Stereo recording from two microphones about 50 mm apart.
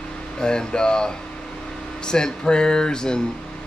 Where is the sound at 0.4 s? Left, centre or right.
Centre.